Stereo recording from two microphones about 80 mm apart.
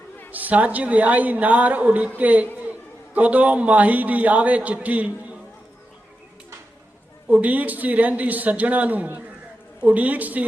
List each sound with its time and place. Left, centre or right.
0.3 s a woman's voice: right
7.3 s a woman's voice: centre